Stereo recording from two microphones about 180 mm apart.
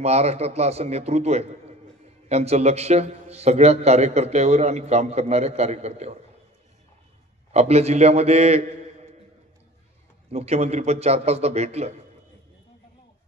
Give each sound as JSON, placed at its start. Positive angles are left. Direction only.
{"t": 0.0, "sound": "a man's voice", "side_deg": -35}
{"t": 7.5, "sound": "a man's voice", "side_deg": -35}
{"t": 10.3, "sound": "a man's voice", "side_deg": -35}